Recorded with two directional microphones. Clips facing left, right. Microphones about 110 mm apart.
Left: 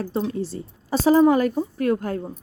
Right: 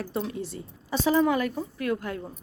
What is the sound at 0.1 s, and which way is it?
Speech, 30° left (ahead or behind).